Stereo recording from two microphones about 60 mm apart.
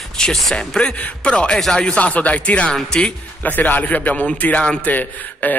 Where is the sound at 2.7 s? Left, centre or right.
Centre.